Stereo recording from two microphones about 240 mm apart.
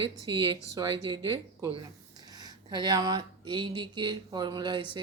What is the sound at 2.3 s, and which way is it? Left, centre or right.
Speech, centre.